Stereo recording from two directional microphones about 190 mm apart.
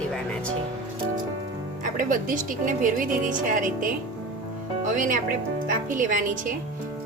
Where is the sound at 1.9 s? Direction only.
45° right (ahead or behind).